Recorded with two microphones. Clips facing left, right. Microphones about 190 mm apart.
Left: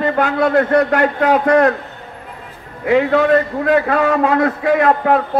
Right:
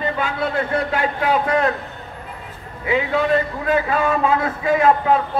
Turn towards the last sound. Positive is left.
turn(degrees=65)  # may be behind; listen again after turning